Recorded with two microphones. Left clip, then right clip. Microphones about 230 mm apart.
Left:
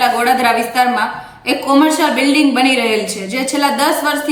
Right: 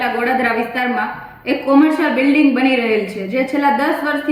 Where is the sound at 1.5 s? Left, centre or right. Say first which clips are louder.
Left 1 dB; centre.